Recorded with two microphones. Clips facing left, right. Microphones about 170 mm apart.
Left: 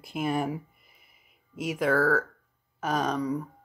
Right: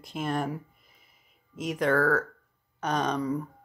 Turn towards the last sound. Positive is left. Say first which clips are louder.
# even
turn(degrees=0)  # may be behind; listen again after turning